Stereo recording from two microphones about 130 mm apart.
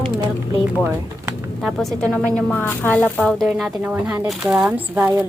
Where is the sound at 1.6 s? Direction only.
Centre (ahead or behind).